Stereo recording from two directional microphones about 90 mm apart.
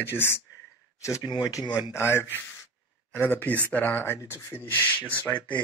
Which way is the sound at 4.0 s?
30° left (ahead or behind).